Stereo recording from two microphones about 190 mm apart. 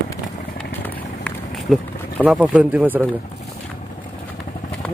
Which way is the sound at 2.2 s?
5° right (ahead or behind).